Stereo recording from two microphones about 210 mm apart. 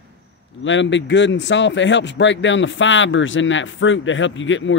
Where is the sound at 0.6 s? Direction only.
60° left (ahead or behind).